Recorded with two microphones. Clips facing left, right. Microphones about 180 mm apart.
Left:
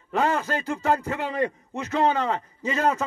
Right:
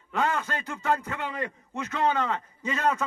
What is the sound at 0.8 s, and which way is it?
A man's voice, 25° left (ahead or behind).